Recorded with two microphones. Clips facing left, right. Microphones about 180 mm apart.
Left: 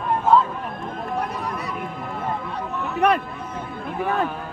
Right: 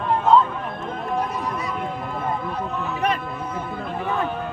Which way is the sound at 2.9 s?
65° left (ahead or behind).